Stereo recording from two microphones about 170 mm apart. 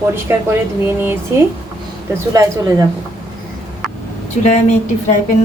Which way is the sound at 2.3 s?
20° right (ahead or behind).